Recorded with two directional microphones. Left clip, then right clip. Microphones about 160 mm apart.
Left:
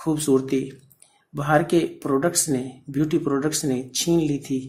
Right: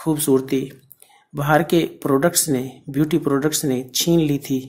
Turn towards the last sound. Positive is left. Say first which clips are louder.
# right 3 dB
turn(degrees=-20)  # may be behind; listen again after turning